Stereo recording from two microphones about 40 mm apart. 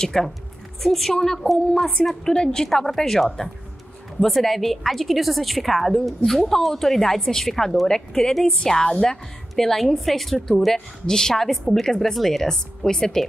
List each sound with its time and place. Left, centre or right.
0.0 s a woman's voice: centre
2.2 s a woman's voice: centre